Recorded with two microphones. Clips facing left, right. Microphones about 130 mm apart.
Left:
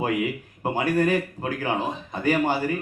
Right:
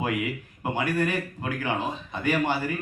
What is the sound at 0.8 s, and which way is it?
A man's voice, 40° left (ahead or behind).